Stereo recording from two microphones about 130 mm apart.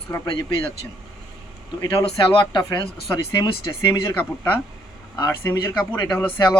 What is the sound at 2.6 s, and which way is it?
Speech, 25° left (ahead or behind).